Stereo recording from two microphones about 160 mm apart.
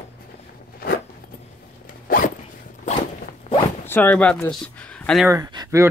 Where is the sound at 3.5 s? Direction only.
45° left (ahead or behind).